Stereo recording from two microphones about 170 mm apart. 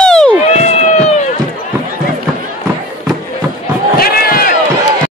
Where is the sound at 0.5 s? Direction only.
40° left (ahead or behind).